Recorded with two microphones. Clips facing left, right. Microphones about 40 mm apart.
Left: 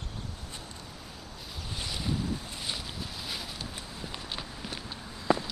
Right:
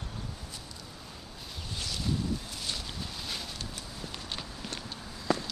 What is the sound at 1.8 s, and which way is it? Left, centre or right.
Boat, centre.